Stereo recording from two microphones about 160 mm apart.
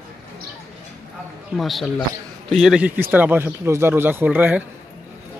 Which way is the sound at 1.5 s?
Centre (ahead or behind).